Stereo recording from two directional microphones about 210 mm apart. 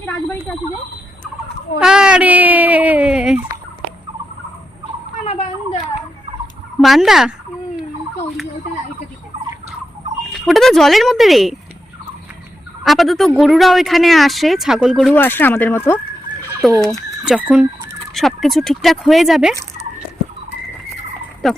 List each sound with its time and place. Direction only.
0.0 s a sound: 10° left (ahead or behind)
1.8 s speech: 5° right (ahead or behind)
5.2 s a sound: 30° left (ahead or behind)
6.8 s speech: centre (ahead or behind)
10.3 s speech: centre (ahead or behind)
12.8 s speech: centre (ahead or behind)
15.1 s speech: 10° left (ahead or behind)
16.8 s speech: centre (ahead or behind)
21.4 s speech: centre (ahead or behind)